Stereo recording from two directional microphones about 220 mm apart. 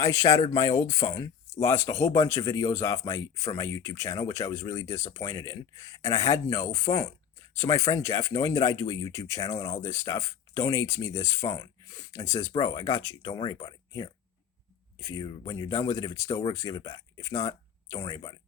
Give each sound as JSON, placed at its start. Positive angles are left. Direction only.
{"t": 0.0, "sound": "speech", "side_deg": 15}